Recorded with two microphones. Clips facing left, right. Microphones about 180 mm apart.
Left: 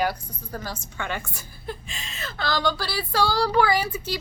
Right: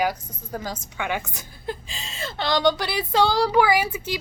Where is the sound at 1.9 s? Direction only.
30° right (ahead or behind); by 3.9 s 15° right (ahead or behind).